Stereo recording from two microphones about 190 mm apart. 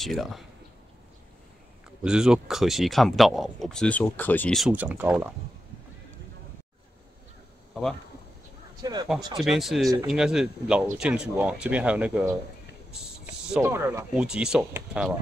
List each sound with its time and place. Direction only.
0.0 s speech: centre (ahead or behind)
2.0 s speech: 5° right (ahead or behind)
8.8 s speech: 20° right (ahead or behind)
9.4 s speech: centre (ahead or behind)
12.9 s a sound: 5° right (ahead or behind)
13.7 s speech: 15° right (ahead or behind)